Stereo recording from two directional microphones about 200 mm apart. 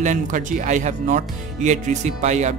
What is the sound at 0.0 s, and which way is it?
Speech, 40° right (ahead or behind).